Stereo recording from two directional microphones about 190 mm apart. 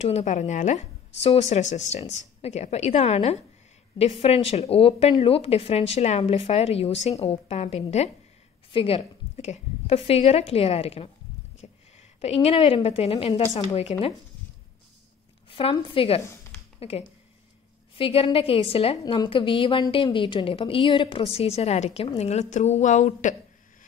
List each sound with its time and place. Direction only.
0.0 s a woman's voice: 35° left (ahead or behind)
11.6 s a sound: 35° left (ahead or behind)
12.2 s a woman's voice: 35° left (ahead or behind)
15.5 s a woman's voice: 25° left (ahead or behind)
17.9 s a woman's voice: 30° left (ahead or behind)